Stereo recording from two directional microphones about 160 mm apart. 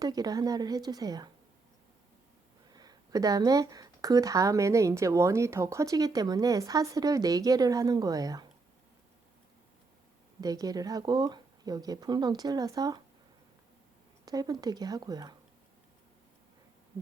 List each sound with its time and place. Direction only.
0.0 s speech: 25° right (ahead or behind)
2.7 s speech: 25° right (ahead or behind)
10.4 s speech: 25° right (ahead or behind)
14.3 s speech: 25° right (ahead or behind)